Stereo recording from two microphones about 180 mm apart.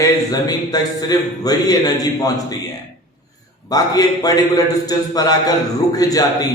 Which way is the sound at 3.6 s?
20° left (ahead or behind).